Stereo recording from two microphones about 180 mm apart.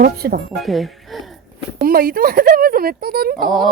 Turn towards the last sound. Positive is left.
turn(degrees=-60)  # may be behind; listen again after turning